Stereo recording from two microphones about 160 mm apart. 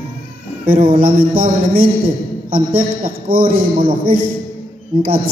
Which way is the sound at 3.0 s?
60° right (ahead or behind).